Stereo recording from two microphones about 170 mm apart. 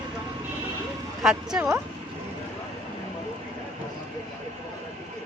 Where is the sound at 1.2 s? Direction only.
5° right (ahead or behind).